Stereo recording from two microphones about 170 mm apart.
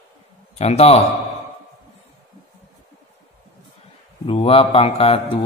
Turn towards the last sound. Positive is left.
turn(degrees=35)  # may be behind; listen again after turning